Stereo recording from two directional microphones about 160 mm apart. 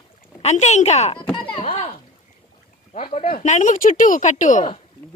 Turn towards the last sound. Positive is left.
turn(degrees=50)  # may be behind; listen again after turning